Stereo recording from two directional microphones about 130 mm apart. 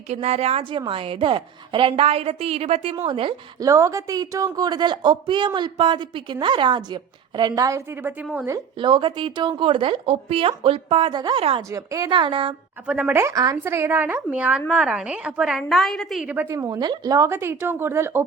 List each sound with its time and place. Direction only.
0.1 s a woman's voice: 55° right (ahead or behind)
3.6 s a woman's voice: 25° right (ahead or behind)
8.8 s speech: 40° right (ahead or behind)
12.9 s speech: 10° right (ahead or behind)
13.1 s a woman's voice: 25° right (ahead or behind); by 16.3 s centre (ahead or behind)
16.3 s a woman's voice: 15° right (ahead or behind)